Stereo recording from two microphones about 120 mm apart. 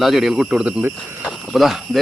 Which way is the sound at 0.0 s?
Centre (ahead or behind).